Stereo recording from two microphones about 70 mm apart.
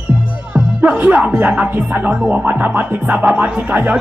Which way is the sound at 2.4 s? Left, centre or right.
Right.